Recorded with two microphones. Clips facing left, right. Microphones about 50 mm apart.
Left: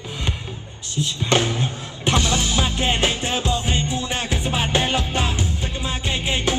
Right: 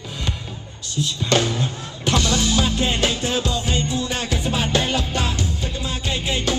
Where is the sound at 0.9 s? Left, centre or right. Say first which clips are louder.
Even; left.